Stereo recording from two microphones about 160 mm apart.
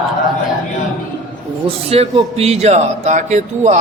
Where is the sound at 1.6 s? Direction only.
35° right (ahead or behind).